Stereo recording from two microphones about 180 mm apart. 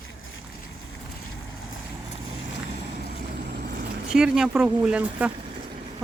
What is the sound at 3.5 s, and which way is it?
Vehicle, 65° right (ahead or behind).